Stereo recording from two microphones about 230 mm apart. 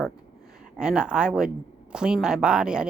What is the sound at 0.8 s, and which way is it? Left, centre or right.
Speech, centre.